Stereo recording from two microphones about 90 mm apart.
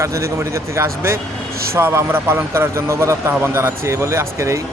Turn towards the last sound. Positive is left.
turn(degrees=-30)  # may be behind; listen again after turning